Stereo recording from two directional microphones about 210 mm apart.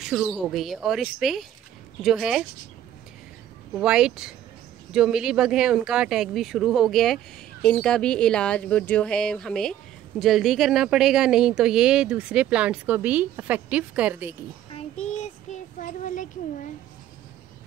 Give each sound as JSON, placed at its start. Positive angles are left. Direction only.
{"t": 0.0, "sound": "speech", "side_deg": 0}
{"t": 3.7, "sound": "speech", "side_deg": -5}
{"t": 14.7, "sound": "child singing", "side_deg": 30}
{"t": 15.8, "sound": "a child's voice", "side_deg": 35}